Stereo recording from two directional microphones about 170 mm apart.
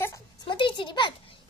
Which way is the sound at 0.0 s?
25° left (ahead or behind).